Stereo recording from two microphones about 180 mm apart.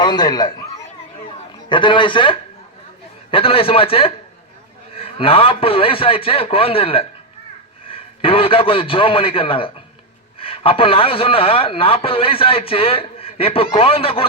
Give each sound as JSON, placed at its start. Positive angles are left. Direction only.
{"t": 0.0, "sound": "a man's voice", "side_deg": 25}
{"t": 1.7, "sound": "a man's voice", "side_deg": 25}